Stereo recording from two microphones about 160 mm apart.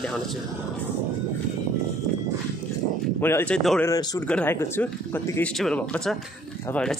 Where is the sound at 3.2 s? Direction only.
15° left (ahead or behind).